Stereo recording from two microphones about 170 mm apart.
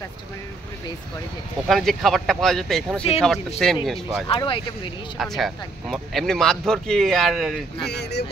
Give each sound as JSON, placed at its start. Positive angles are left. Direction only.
{"t": 1.7, "sound": "speech", "side_deg": 0}
{"t": 4.3, "sound": "speech", "side_deg": 30}
{"t": 5.1, "sound": "speech", "side_deg": 0}
{"t": 7.9, "sound": "speech", "side_deg": 80}